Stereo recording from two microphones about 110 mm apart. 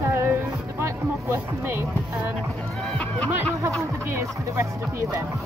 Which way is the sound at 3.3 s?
25° right (ahead or behind).